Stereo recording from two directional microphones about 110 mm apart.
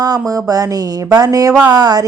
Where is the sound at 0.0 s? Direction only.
35° right (ahead or behind).